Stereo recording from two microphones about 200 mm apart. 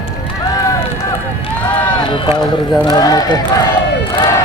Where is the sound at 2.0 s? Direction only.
25° left (ahead or behind).